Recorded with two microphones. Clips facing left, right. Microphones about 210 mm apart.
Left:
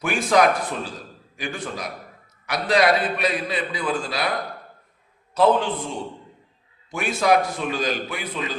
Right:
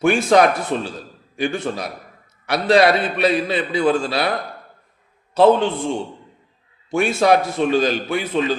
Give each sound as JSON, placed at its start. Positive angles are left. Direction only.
{"t": 0.0, "sound": "a man's voice", "side_deg": -25}
{"t": 5.3, "sound": "a man's voice", "side_deg": -25}